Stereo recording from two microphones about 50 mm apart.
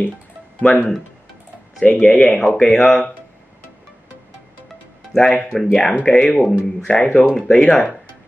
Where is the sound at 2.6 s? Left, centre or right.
Centre.